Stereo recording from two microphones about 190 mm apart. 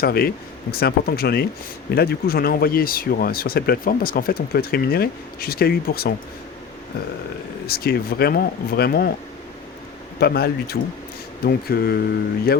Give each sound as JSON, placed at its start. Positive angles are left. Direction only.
{"t": 0.0, "sound": "speech", "side_deg": 55}
{"t": 7.7, "sound": "speech", "side_deg": 55}
{"t": 10.2, "sound": "speech", "side_deg": 55}